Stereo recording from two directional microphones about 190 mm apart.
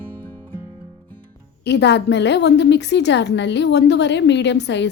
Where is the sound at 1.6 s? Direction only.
65° left (ahead or behind).